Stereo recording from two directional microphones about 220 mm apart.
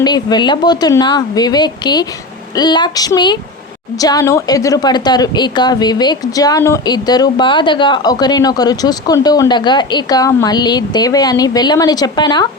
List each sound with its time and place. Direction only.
0.0 s a woman's voice: 20° left (ahead or behind)